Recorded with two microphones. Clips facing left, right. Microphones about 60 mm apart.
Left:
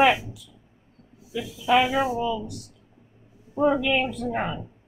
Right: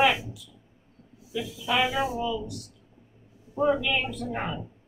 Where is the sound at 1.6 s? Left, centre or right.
Left.